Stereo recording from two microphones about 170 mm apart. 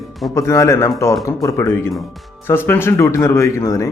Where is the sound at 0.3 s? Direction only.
15° left (ahead or behind).